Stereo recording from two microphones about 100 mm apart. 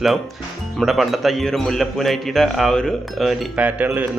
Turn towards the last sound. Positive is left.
turn(degrees=-15)  # may be behind; listen again after turning